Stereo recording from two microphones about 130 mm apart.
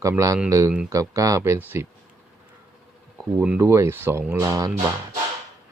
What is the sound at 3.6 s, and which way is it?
Speech, 20° right (ahead or behind).